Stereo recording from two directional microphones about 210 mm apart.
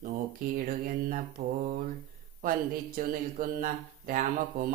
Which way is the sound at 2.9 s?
40° right (ahead or behind).